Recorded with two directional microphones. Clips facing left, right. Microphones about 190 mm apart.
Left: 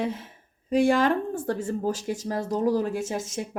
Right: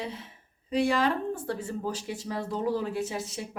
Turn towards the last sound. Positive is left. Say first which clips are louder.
# left 3 dB
turn(degrees=45)  # may be behind; listen again after turning